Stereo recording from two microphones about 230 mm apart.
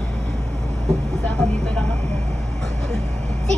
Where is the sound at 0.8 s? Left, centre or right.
Centre.